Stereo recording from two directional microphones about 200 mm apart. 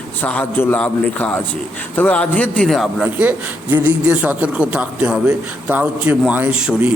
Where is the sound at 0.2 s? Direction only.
10° left (ahead or behind).